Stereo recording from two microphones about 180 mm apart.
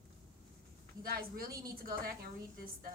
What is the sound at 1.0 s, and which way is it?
A woman's voice, 55° right (ahead or behind).